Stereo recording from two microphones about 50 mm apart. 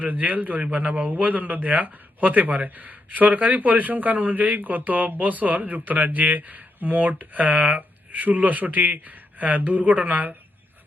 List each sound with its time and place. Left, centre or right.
0.0 s a man's voice: right